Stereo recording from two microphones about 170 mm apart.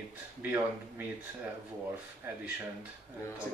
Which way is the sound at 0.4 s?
10° right (ahead or behind).